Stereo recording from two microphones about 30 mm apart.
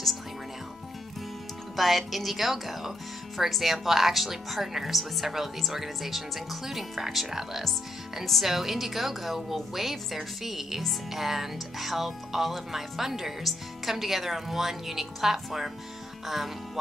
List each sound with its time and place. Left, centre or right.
1.8 s speech: centre